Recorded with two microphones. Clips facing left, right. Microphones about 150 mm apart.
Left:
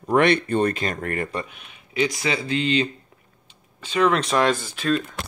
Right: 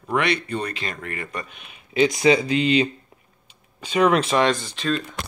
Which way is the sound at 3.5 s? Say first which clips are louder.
Right 4 dB; 15° right (ahead or behind).